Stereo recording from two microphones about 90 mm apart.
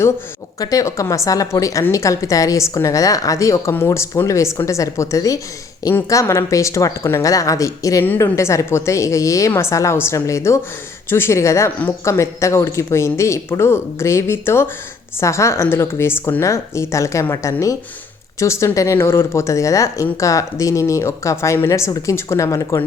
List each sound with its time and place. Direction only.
0.6 s speech: 40° left (ahead or behind)
8.0 s speech: 25° left (ahead or behind)